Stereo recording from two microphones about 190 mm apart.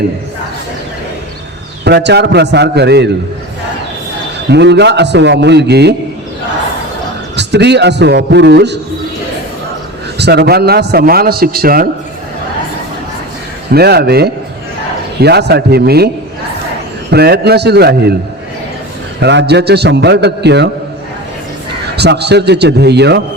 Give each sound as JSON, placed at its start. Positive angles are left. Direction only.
{"t": 1.8, "sound": "a man's voice", "side_deg": -60}
{"t": 4.4, "sound": "a man's voice", "side_deg": -65}
{"t": 7.3, "sound": "a man's voice", "side_deg": -65}
{"t": 10.2, "sound": "a man's voice", "side_deg": -60}
{"t": 13.7, "sound": "a man's voice", "side_deg": -55}
{"t": 17.1, "sound": "a man's voice", "side_deg": -60}
{"t": 19.2, "sound": "a man's voice", "side_deg": -65}
{"t": 21.8, "sound": "a man's voice", "side_deg": -60}